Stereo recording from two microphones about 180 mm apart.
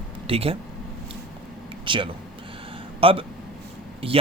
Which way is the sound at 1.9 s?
30° right (ahead or behind).